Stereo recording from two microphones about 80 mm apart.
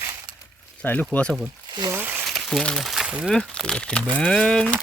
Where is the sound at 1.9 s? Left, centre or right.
Right.